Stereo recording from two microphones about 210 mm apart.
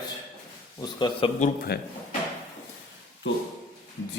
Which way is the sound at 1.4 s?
35° left (ahead or behind).